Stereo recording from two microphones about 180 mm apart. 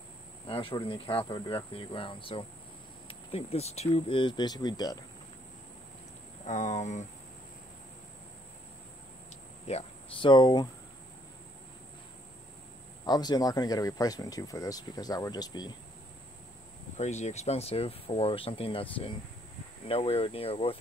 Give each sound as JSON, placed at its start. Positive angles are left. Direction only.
{"t": 0.5, "sound": "speech", "side_deg": 30}
{"t": 6.4, "sound": "speech", "side_deg": 40}
{"t": 9.7, "sound": "speech", "side_deg": 35}
{"t": 10.3, "sound": "speech", "side_deg": 25}
{"t": 13.0, "sound": "speech", "side_deg": 20}
{"t": 16.9, "sound": "speech", "side_deg": 40}